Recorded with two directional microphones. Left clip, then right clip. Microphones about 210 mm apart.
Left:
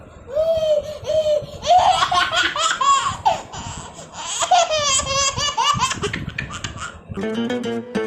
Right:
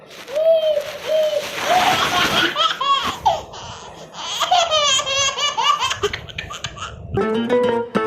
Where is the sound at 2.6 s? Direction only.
20° left (ahead or behind).